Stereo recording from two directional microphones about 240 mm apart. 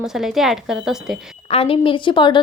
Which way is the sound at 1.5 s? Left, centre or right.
Left.